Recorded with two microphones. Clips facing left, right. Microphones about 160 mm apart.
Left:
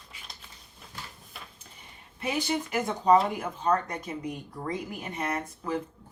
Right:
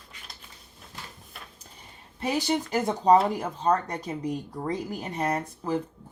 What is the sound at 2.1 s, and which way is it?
Speech, 35° right (ahead or behind).